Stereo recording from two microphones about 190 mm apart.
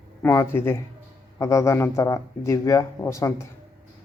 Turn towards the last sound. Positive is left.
turn(degrees=15)  # may be behind; listen again after turning